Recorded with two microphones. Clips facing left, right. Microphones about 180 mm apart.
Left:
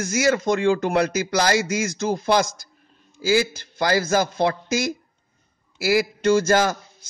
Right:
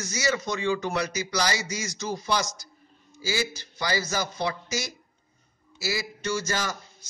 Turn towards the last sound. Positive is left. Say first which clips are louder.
# left 11 dB
turn(degrees=55)  # may be behind; listen again after turning